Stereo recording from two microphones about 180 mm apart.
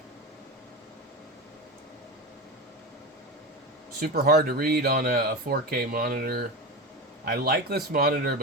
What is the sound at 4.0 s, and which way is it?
Speech, 55° right (ahead or behind).